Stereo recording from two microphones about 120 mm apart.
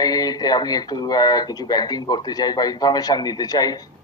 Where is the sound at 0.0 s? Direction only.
35° left (ahead or behind).